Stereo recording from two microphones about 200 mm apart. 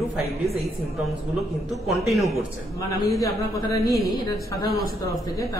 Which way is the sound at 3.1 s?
15° left (ahead or behind).